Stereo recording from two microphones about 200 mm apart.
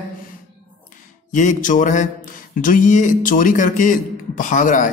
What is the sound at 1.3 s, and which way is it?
A man's voice, 40° left (ahead or behind).